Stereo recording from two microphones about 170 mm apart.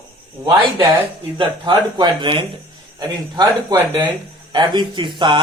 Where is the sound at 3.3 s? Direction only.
15° right (ahead or behind).